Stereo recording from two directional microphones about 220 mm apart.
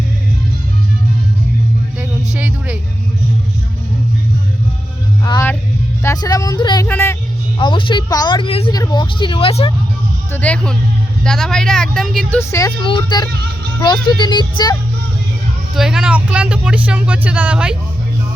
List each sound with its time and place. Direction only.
2.0 s music: 5° right (ahead or behind)
5.2 s music: 15° left (ahead or behind)
6.0 s a sound: 15° left (ahead or behind)
6.8 s speech: 10° left (ahead or behind)
7.6 s speech: 20° left (ahead or behind)
10.3 s speech: 5° left (ahead or behind)
15.7 s speech: centre (ahead or behind)